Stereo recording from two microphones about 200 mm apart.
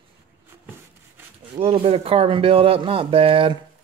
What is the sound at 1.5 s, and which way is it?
Speech, 30° right (ahead or behind).